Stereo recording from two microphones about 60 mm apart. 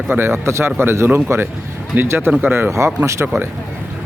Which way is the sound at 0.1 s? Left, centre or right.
Right.